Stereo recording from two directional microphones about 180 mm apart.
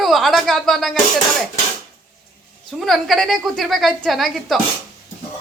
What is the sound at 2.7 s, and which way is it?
Speech, centre (ahead or behind).